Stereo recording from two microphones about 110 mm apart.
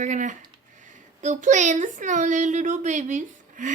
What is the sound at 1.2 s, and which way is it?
Speech, 90° right.